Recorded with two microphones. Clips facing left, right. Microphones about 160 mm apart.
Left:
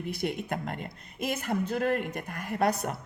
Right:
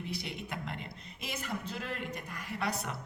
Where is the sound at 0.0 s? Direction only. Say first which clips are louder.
Left 8 dB; 50° left (ahead or behind).